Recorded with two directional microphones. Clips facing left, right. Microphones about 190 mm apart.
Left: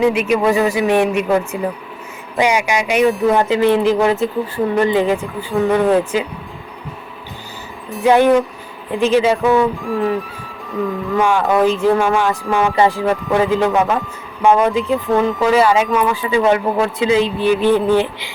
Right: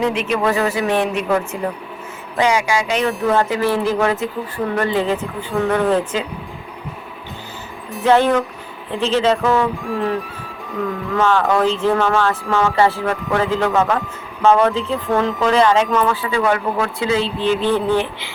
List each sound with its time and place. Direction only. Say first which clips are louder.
0.0 s speech: left 4 dB; 10° left (ahead or behind)
8.0 s speech: left 3 dB; 10° left (ahead or behind)
9.8 s speech: left 3 dB; centre (ahead or behind)
11.1 s speech: left 1 dB; 15° left (ahead or behind)